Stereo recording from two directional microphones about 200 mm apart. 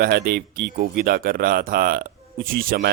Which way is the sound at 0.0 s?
50° right (ahead or behind).